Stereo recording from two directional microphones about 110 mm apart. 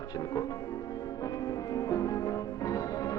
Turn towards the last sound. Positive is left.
turn(degrees=35)  # may be behind; listen again after turning